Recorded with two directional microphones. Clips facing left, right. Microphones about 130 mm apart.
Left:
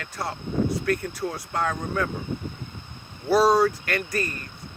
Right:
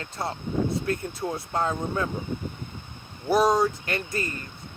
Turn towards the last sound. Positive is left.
turn(degrees=-20)  # may be behind; listen again after turning